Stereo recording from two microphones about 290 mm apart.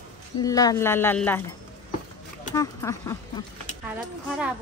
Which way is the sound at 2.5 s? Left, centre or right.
Centre.